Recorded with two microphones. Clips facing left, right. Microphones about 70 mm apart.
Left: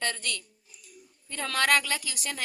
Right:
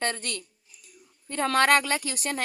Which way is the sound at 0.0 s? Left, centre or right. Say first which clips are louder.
Right 2 dB; right.